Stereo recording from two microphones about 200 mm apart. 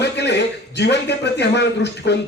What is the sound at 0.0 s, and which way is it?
A man's voice, 60° left (ahead or behind).